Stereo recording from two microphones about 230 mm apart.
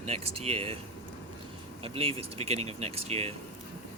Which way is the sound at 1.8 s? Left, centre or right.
Right.